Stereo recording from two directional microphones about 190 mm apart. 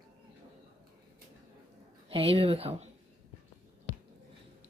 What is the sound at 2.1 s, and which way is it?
Speech, 30° right (ahead or behind).